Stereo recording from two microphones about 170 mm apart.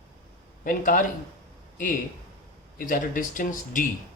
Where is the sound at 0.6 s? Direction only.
50° left (ahead or behind).